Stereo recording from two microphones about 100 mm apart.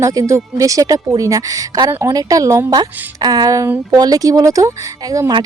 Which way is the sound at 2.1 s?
40° right (ahead or behind).